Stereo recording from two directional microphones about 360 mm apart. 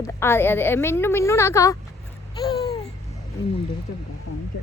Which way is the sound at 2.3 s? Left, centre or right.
Centre.